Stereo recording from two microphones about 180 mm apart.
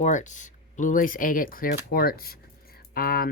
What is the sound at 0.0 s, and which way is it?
Speech, 40° left (ahead or behind).